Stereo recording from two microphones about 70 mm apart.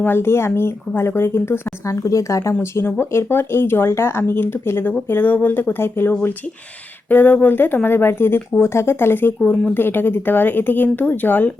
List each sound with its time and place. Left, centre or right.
0.0 s speech: left